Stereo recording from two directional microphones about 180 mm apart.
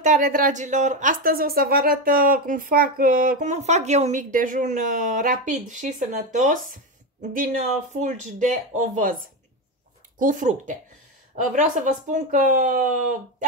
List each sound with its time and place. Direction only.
0.0 s a woman's voice: 45° right (ahead or behind)
10.1 s a woman's voice: 45° right (ahead or behind)